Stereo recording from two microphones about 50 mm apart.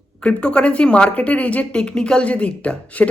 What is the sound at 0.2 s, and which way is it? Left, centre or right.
A woman's voice, left.